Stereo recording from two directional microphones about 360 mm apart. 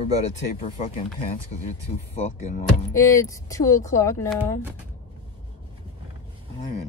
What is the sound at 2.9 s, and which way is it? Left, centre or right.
Speech, centre.